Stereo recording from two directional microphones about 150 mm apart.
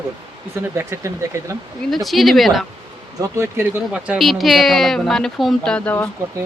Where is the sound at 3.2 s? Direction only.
20° right (ahead or behind).